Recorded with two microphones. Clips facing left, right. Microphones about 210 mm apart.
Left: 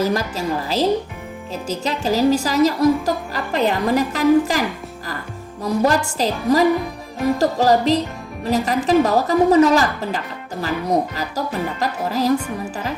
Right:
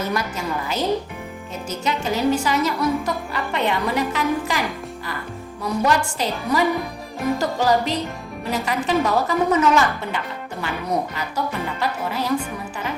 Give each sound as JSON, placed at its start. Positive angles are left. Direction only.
{"t": 0.0, "sound": "a woman's voice", "side_deg": 35}
{"t": 5.6, "sound": "a woman's voice", "side_deg": 35}